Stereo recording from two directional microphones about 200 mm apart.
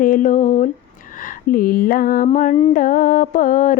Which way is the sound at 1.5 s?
45° left (ahead or behind).